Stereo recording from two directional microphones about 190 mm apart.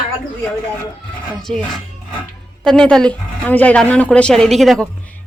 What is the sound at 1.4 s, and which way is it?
Speech, centre (ahead or behind).